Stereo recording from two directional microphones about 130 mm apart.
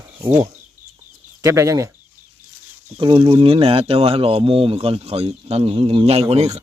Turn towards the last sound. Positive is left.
turn(degrees=-55)  # may be behind; listen again after turning